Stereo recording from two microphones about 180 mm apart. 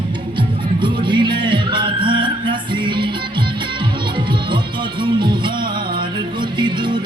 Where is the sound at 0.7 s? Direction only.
25° right (ahead or behind).